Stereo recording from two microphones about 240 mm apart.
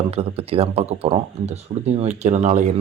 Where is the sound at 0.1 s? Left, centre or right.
Right.